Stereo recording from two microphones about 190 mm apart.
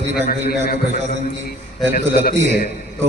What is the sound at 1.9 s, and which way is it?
Speech, 50° left (ahead or behind).